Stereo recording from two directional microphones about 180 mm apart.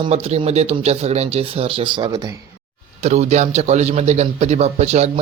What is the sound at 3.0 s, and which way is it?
A man's voice, 35° right (ahead or behind).